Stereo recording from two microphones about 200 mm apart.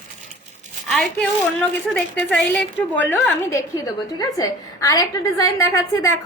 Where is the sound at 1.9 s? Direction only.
5° left (ahead or behind).